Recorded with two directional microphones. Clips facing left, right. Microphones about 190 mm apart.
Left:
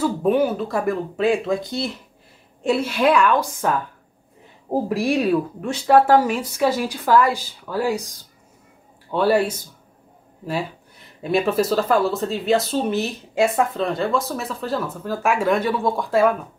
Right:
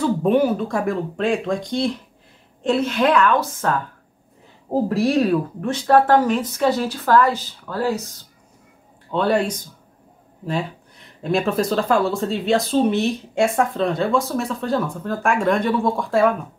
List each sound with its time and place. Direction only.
0.0 s speech: centre (ahead or behind)
9.1 s speech: 5° left (ahead or behind)